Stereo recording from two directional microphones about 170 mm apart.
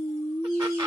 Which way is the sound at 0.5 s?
25° right (ahead or behind).